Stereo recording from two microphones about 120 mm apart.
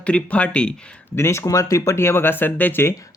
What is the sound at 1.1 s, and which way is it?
Speech, 20° left (ahead or behind).